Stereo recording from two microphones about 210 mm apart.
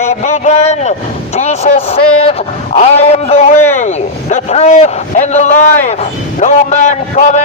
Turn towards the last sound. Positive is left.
turn(degrees=35)  # may be behind; listen again after turning